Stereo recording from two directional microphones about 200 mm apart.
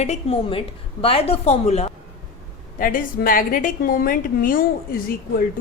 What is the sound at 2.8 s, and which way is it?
A woman's voice, 45° left (ahead or behind).